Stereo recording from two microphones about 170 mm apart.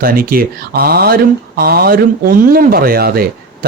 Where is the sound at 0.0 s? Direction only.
60° right (ahead or behind).